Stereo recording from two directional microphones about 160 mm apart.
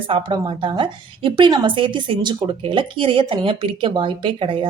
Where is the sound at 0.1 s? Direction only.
30° right (ahead or behind).